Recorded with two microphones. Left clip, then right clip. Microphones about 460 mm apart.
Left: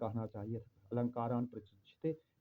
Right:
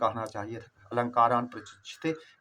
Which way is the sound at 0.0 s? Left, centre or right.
Left.